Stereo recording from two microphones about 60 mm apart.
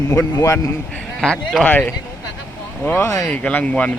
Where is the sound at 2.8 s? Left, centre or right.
Left.